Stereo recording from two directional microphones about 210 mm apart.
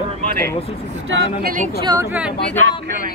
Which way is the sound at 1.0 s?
65° right (ahead or behind).